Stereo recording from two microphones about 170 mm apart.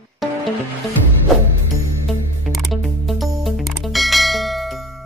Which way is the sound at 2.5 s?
Centre (ahead or behind).